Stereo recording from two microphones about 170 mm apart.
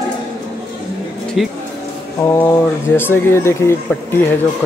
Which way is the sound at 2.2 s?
15° left (ahead or behind).